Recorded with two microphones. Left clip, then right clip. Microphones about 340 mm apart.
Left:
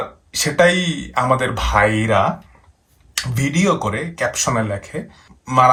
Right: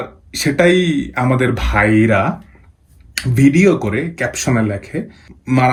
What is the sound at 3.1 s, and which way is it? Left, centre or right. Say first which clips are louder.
Speech: right 8 dB; centre.